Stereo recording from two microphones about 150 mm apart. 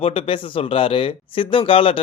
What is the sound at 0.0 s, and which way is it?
Speech, 35° left (ahead or behind).